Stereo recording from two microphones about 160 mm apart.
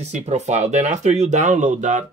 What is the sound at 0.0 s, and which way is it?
Speech, 45° right (ahead or behind).